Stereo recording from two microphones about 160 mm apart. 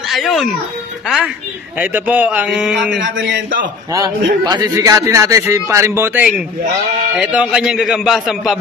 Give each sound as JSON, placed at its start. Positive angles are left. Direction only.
{"t": 0.1, "sound": "a man's voice", "side_deg": 0}
{"t": 3.9, "sound": "a man's voice", "side_deg": -20}